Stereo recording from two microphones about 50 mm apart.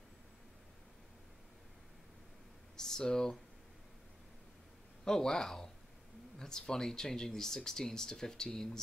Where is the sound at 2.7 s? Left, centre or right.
Centre.